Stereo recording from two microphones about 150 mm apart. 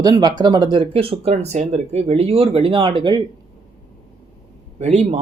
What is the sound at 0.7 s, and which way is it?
Speech, 40° right (ahead or behind).